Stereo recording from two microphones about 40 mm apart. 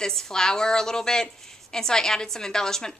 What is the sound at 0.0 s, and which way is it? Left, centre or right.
A woman's voice, centre.